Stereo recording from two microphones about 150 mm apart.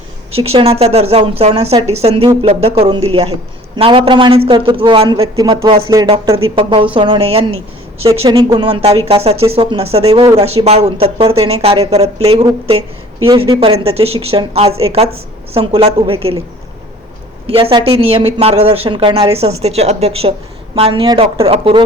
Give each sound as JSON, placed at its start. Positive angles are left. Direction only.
{"t": 0.3, "sound": "speech", "side_deg": -40}
{"t": 8.3, "sound": "speech", "side_deg": -25}
{"t": 17.4, "sound": "speech", "side_deg": -40}